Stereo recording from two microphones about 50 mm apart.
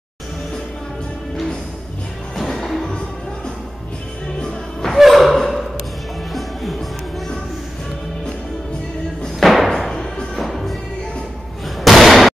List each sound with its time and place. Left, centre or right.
1.3 s music: centre
4.9 s a sound: centre
6.3 s music: centre
9.4 s thump: centre
9.7 s music: centre
11.8 s slam: centre